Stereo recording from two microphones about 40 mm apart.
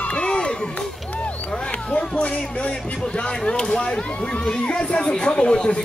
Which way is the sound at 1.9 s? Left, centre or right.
Left.